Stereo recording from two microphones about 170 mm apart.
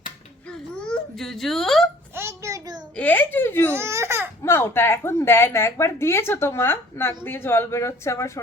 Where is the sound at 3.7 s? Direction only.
15° right (ahead or behind).